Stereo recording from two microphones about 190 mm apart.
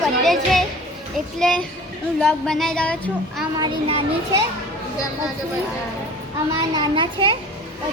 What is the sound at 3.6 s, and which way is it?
Speech, 30° right (ahead or behind).